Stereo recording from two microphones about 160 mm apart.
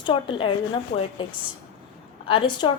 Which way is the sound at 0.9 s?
60° left (ahead or behind).